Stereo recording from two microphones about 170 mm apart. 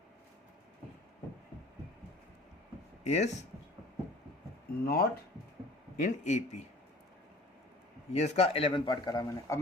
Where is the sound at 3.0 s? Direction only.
40° left (ahead or behind).